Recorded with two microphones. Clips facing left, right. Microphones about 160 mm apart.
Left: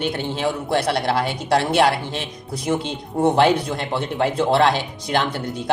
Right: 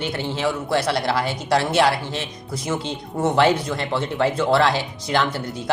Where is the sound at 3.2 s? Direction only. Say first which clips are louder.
Left 2 dB; 20° left (ahead or behind).